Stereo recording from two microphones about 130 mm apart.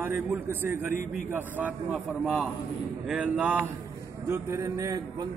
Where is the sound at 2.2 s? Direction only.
5° right (ahead or behind).